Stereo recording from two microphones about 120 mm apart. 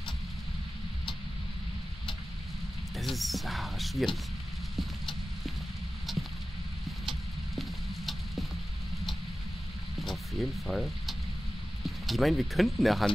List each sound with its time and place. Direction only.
3.0 s speech: centre (ahead or behind)
7.5 s a sound: centre (ahead or behind)
9.9 s frying: centre (ahead or behind)
11.8 s speech: centre (ahead or behind)